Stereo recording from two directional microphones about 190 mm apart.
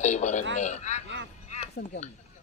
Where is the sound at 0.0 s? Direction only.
40° left (ahead or behind).